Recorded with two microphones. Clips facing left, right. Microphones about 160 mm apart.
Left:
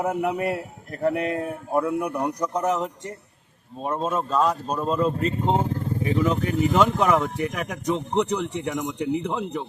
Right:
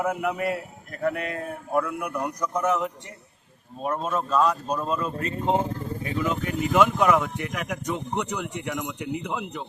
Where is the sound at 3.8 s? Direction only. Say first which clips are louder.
Left 1 dB; 25° left (ahead or behind).